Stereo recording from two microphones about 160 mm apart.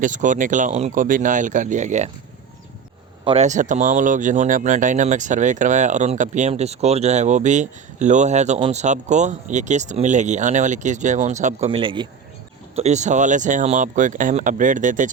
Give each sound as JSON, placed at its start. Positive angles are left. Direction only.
{"t": 0.0, "sound": "speech", "side_deg": -50}
{"t": 3.2, "sound": "speech", "side_deg": -45}
{"t": 12.7, "sound": "speech", "side_deg": -45}